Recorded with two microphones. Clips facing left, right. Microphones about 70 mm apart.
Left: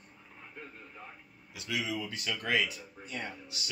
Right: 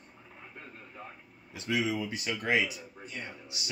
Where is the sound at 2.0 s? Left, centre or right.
Centre.